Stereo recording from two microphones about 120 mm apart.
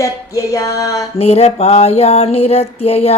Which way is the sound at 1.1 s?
60° left (ahead or behind).